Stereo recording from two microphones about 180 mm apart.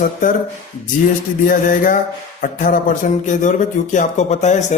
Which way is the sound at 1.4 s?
50° left (ahead or behind).